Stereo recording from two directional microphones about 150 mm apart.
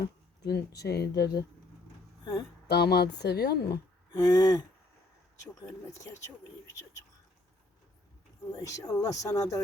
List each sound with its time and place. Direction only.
0.0 s speech: 90° left
2.6 s speech: 90° left
4.1 s speech: 25° left (ahead or behind)
5.6 s speech: 20° left (ahead or behind)
8.5 s speech: 25° left (ahead or behind)